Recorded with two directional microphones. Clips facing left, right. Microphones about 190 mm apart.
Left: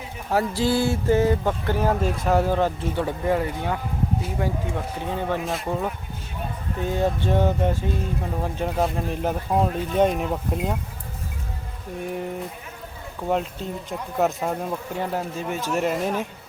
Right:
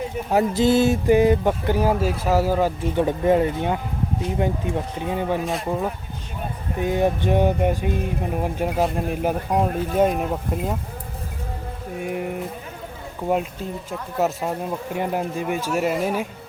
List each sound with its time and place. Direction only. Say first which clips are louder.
0.3 s speech: right 4 dB; 20° right (ahead or behind)
5.5 s speech: right 2 dB; centre (ahead or behind)
6.7 s speech: right 3 dB; 15° right (ahead or behind)
11.9 s speech: right 2 dB; 10° right (ahead or behind)
13.2 s speech: right 2 dB; 10° right (ahead or behind)
14.9 s speech: right 5 dB; 15° right (ahead or behind)